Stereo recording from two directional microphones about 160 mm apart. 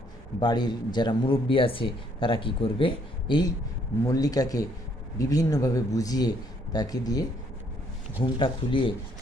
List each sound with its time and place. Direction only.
0.3 s speech: 25° left (ahead or behind)
8.4 s speech: 30° left (ahead or behind)